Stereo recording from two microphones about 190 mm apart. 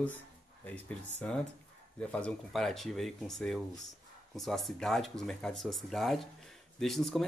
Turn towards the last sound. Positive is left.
turn(degrees=0)  # may be behind; listen again after turning